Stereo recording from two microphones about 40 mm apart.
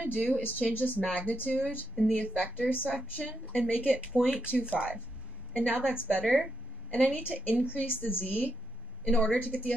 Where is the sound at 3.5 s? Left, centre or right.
Left.